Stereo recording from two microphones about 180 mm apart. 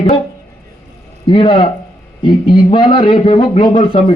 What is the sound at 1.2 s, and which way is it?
A man's voice, 25° left (ahead or behind).